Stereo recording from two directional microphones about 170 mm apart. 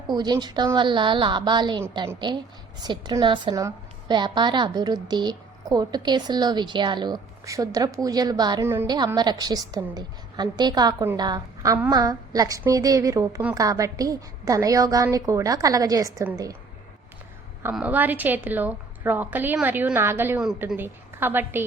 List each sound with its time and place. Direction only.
0.1 s speech: 25° right (ahead or behind)
8.6 s a woman's voice: 15° right (ahead or behind)
9.1 s speech: 25° right (ahead or behind)
17.6 s a woman's voice: 10° right (ahead or behind)